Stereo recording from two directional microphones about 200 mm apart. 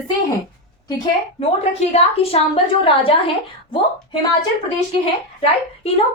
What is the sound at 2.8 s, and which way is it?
Speech, 25° left (ahead or behind).